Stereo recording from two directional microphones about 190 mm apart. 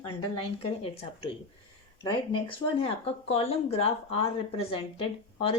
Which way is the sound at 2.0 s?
25° left (ahead or behind).